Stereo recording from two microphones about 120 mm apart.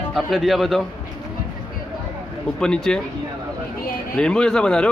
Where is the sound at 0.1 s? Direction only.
Centre (ahead or behind).